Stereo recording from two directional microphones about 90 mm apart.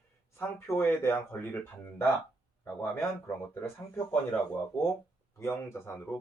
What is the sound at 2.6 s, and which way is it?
Speech, 25° left (ahead or behind).